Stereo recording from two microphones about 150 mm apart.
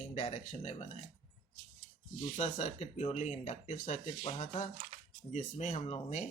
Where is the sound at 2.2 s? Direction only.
50° left (ahead or behind).